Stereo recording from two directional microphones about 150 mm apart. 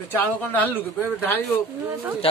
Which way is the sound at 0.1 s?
15° left (ahead or behind).